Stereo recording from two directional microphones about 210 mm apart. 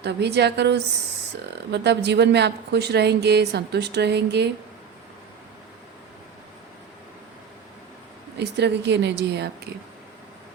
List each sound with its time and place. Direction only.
0.0 s a woman's voice: 50° right (ahead or behind)
8.4 s a woman's voice: 55° right (ahead or behind)